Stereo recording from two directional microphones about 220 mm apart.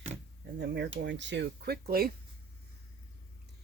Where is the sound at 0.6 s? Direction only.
50° right (ahead or behind).